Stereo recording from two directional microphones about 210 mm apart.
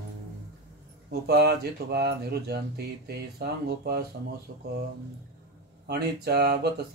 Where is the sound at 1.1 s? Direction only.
50° right (ahead or behind).